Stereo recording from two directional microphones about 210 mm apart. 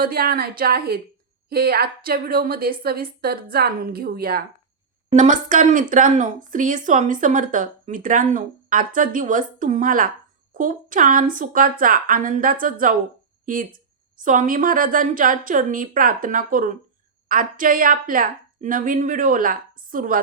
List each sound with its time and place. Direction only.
0.0 s a woman's voice: 45° right (ahead or behind)